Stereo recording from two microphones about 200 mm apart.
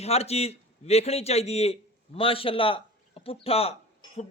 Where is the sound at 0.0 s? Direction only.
30° left (ahead or behind).